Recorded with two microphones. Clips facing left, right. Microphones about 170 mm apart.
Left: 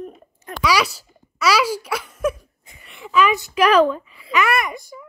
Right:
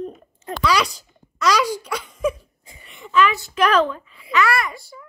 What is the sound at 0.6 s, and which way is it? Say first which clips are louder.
Speech: left 1 dB; 10° left (ahead or behind).